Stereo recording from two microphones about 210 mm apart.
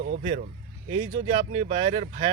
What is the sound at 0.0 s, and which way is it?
Speech, 40° right (ahead or behind).